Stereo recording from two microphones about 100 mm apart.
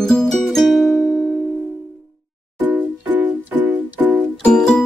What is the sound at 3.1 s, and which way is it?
Music, 15° right (ahead or behind).